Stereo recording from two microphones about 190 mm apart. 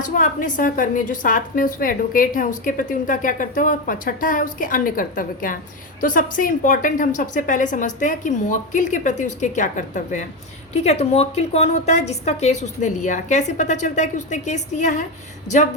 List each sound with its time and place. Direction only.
0.0 s a woman's voice: 45° left (ahead or behind)